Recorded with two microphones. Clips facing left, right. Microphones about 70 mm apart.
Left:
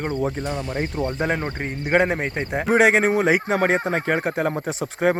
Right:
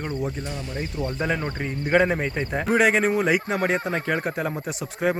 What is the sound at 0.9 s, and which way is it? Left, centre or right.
Speech, left.